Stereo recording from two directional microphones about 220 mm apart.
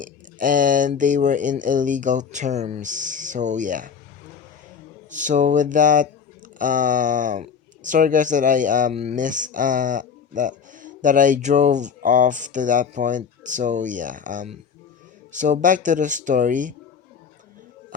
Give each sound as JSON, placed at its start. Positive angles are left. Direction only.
{"t": 0.0, "sound": "speech", "side_deg": -35}
{"t": 5.1, "sound": "speech", "side_deg": -35}